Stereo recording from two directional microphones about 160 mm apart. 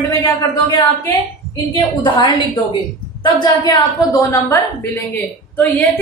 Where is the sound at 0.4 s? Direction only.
20° left (ahead or behind).